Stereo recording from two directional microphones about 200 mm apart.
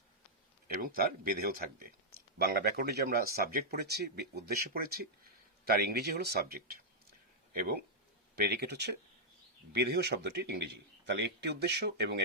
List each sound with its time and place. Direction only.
0.7 s a man's voice: 45° right (ahead or behind)